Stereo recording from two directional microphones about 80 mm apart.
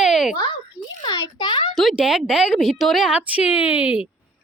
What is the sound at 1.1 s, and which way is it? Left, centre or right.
Speech, left.